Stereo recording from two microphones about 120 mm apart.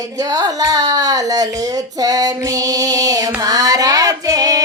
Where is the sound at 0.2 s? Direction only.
35° right (ahead or behind).